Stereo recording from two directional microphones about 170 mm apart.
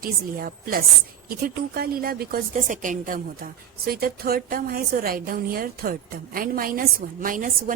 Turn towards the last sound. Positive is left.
turn(degrees=-50)  # may be behind; listen again after turning